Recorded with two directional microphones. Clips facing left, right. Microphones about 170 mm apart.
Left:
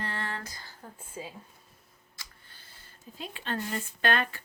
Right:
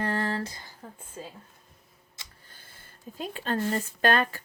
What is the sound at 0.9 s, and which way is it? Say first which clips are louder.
Speech: left 2 dB; 10° left (ahead or behind).